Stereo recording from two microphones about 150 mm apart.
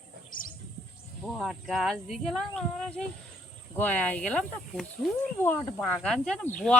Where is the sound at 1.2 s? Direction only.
Centre (ahead or behind).